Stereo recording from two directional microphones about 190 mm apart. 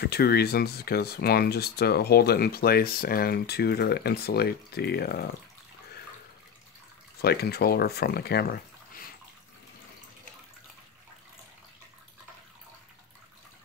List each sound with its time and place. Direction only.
0.0 s speech: 55° left (ahead or behind)
7.2 s speech: 55° left (ahead or behind)